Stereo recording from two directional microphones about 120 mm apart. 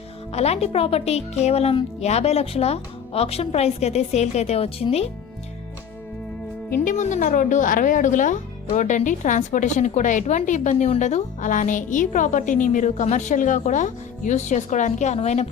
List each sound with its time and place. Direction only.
0.3 s speech: 60° left (ahead or behind)
6.8 s speech: 85° left; by 15.4 s 65° left (ahead or behind)